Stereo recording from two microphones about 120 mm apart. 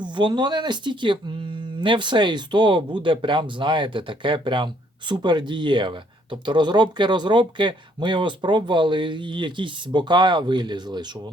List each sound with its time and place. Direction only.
0.0 s speech: 40° right (ahead or behind)